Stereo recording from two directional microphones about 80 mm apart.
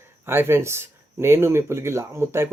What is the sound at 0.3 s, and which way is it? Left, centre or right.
Speech, right.